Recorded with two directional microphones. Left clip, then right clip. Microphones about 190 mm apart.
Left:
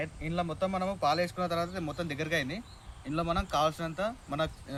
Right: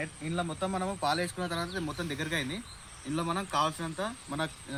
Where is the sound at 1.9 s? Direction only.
25° left (ahead or behind).